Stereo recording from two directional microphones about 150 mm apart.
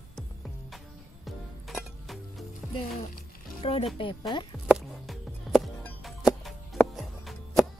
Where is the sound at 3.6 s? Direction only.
40° left (ahead or behind).